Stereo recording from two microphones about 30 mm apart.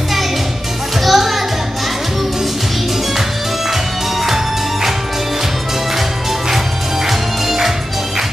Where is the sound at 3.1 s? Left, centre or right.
Centre.